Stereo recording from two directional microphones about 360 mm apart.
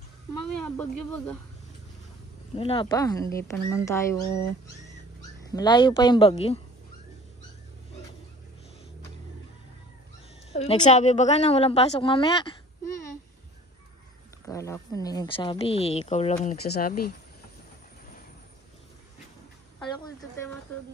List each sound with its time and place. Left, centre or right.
0.3 s speech: centre
2.5 s speech: centre
10.5 s a woman's voice: centre
14.4 s speech: centre; by 17.1 s left